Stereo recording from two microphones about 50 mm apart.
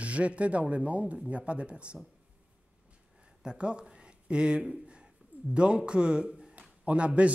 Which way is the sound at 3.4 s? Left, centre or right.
Centre.